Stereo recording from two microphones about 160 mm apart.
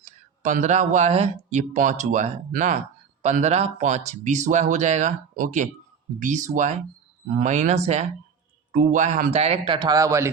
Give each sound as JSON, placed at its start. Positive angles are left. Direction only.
{"t": 0.0, "sound": "a man's voice", "side_deg": -50}